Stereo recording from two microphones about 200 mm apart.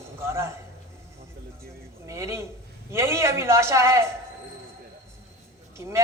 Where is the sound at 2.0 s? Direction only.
15° right (ahead or behind).